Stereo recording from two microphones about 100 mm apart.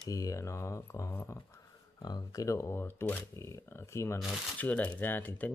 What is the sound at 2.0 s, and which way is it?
Speech, 40° left (ahead or behind).